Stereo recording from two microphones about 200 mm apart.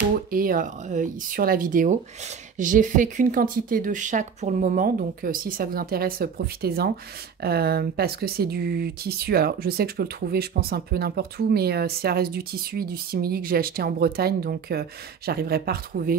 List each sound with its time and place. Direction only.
0.3 s speech: 45° right (ahead or behind)